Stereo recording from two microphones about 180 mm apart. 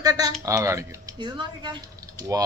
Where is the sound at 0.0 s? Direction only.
20° right (ahead or behind).